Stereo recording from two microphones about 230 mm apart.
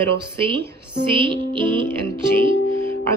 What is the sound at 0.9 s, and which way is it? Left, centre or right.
Music, right.